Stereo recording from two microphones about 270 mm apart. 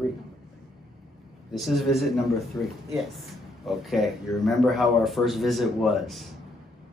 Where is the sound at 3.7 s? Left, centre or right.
Centre.